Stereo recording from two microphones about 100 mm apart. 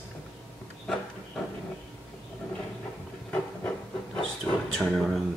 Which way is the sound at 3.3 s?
15° left (ahead or behind).